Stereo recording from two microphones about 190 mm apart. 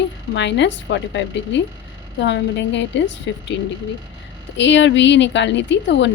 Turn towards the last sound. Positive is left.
turn(degrees=70)  # may be behind; listen again after turning